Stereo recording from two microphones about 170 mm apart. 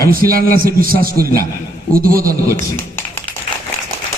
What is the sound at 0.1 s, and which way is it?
A man's voice, 60° right (ahead or behind).